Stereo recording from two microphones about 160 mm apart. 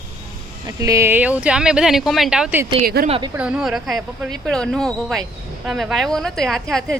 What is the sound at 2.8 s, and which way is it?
Speech, 70° right (ahead or behind).